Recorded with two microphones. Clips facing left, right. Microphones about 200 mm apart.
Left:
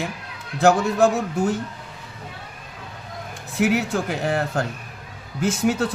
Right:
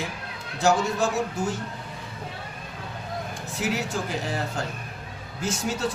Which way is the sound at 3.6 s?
60° left (ahead or behind).